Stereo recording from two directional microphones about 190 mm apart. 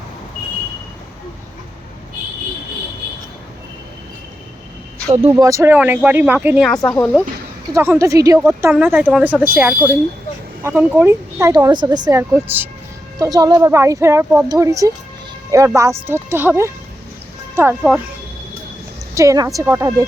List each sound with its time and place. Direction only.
5.0 s speech: 30° right (ahead or behind)
5.3 s speech: 20° right (ahead or behind)
6.7 s speech: 5° left (ahead or behind)
7.7 s speech: 15° right (ahead or behind)
19.1 s speech: 15° right (ahead or behind)